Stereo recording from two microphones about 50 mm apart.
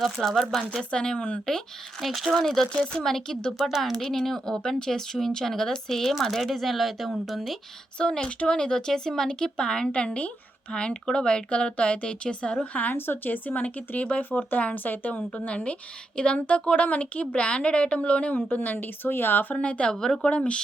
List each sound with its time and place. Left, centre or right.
0.0 s speech: centre
0.9 s a woman's voice: left
2.0 s speech: centre
7.9 s speech: centre
10.1 s a woman's voice: left
10.7 s a woman's voice: centre
12.7 s speech: left
13.0 s a woman's voice: left
18.5 s speech: left
19.5 s a woman's voice: left
19.9 s speech: centre
20.3 s a woman's voice: left